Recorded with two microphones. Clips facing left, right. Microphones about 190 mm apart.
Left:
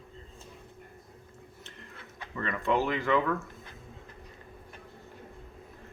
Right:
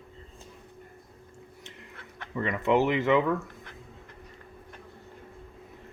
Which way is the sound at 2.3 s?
15° right (ahead or behind).